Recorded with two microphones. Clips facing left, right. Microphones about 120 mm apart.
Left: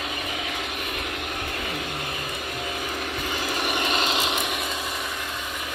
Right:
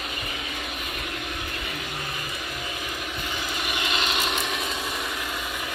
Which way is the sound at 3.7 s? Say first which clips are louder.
Left 2 dB; 45° left (ahead or behind).